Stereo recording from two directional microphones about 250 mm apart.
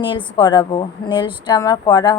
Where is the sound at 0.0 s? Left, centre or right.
Centre.